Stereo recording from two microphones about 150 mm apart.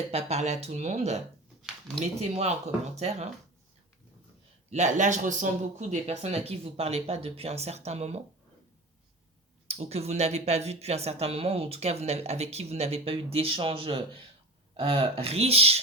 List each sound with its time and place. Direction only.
0.1 s speech: 45° right (ahead or behind)
2.3 s speech: 45° right (ahead or behind)
4.7 s speech: 50° right (ahead or behind)
9.6 s speech: 45° right (ahead or behind)